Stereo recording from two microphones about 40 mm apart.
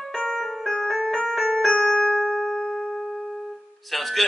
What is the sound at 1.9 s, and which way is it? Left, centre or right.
Music, left.